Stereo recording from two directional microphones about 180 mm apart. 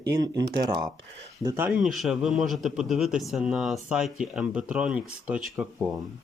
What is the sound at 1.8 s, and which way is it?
Speech, centre (ahead or behind).